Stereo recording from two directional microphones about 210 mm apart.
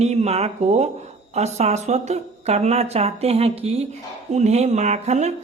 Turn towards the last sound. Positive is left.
turn(degrees=-35)  # may be behind; listen again after turning